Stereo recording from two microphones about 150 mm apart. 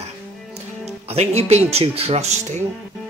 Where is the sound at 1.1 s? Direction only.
45° right (ahead or behind).